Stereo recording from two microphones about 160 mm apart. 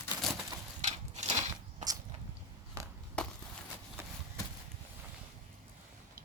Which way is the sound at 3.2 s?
5° left (ahead or behind).